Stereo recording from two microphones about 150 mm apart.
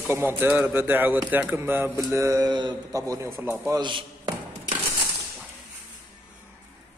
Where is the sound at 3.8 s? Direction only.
30° right (ahead or behind).